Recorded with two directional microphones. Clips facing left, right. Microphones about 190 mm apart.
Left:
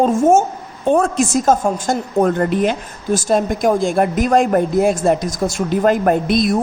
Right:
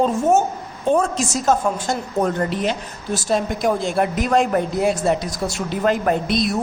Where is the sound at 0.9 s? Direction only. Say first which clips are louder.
Left 4 dB; 60° left (ahead or behind).